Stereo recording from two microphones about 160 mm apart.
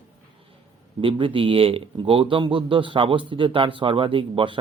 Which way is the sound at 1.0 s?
35° right (ahead or behind).